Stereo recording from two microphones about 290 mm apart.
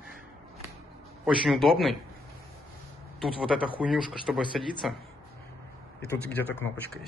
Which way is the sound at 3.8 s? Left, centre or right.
Centre.